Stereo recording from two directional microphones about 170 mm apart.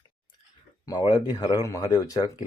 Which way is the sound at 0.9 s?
25° left (ahead or behind).